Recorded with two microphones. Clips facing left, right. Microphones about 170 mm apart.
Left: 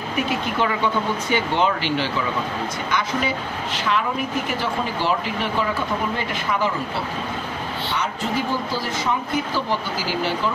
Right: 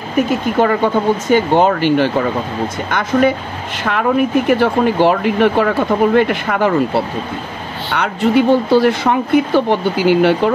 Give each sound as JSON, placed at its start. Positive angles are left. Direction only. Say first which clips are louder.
{"t": 0.1, "sound": "speech", "louder": "right 9 dB", "side_deg": -45}